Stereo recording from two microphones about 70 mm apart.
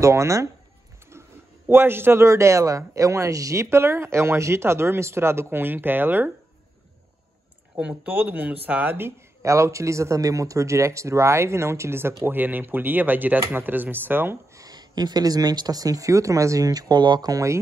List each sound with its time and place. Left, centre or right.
0.0 s speech: right
1.1 s a sound: right
1.7 s a man's voice: right
8.0 s speech: right
9.4 s speech: right
12.3 s speech: right
14.7 s speech: right